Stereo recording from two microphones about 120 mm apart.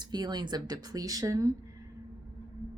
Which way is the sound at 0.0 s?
35° right (ahead or behind).